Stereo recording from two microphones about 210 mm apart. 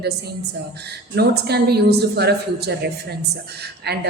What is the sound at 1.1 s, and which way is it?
A woman's voice, 50° right (ahead or behind).